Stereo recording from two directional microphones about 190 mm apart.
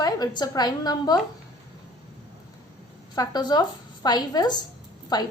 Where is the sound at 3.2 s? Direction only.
20° left (ahead or behind).